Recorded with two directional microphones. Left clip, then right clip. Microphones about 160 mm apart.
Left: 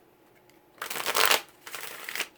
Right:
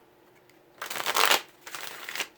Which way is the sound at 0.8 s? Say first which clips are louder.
Right 1 dB; 5° left (ahead or behind).